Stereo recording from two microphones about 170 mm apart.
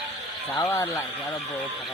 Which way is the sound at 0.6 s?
20° left (ahead or behind).